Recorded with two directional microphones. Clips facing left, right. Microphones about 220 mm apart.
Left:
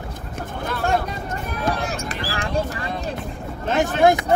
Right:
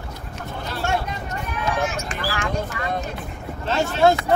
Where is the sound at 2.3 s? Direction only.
35° left (ahead or behind).